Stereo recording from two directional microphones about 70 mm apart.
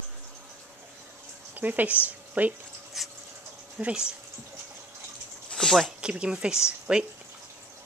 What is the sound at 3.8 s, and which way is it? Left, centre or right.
Speech, centre.